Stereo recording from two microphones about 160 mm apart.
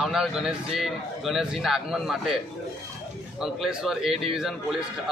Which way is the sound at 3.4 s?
Centre (ahead or behind).